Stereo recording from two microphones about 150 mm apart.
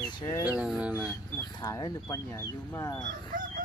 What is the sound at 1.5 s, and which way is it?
Speech, 25° left (ahead or behind).